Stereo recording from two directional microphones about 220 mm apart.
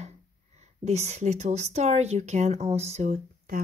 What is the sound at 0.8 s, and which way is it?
Speech, 30° right (ahead or behind).